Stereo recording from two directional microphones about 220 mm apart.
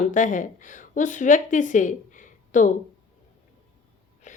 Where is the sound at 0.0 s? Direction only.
35° left (ahead or behind).